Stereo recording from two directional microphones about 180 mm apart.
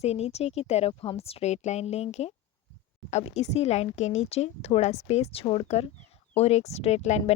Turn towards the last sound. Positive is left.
turn(degrees=35)  # may be behind; listen again after turning